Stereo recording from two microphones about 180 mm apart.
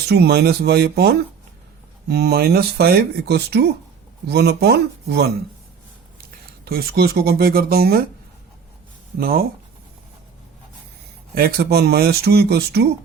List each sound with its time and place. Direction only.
0.0 s speech: 65° right (ahead or behind)
6.3 s speech: 55° right (ahead or behind)
9.1 s speech: 55° right (ahead or behind)
11.3 s speech: 55° right (ahead or behind)